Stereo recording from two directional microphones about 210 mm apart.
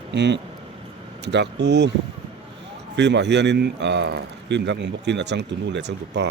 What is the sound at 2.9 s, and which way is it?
Speech, 55° right (ahead or behind).